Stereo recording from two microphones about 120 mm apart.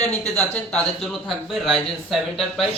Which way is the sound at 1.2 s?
Centre (ahead or behind).